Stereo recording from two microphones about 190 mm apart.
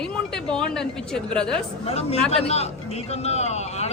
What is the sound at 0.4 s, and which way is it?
A woman's voice, 5° left (ahead or behind).